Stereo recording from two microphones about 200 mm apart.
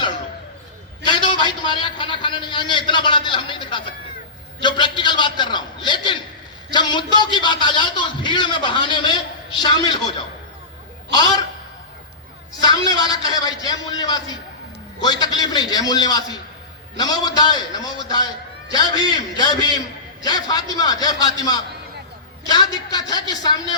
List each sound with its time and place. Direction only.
1.0 s a sound: 25° left (ahead or behind)
4.6 s a man's voice: 25° left (ahead or behind)
12.6 s a man's voice: 20° left (ahead or behind)